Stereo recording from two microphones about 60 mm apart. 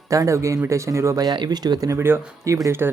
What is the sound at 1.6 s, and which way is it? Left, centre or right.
Speech, right.